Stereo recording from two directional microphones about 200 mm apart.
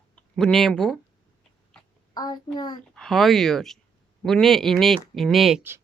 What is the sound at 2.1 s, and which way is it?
Speech, 20° left (ahead or behind).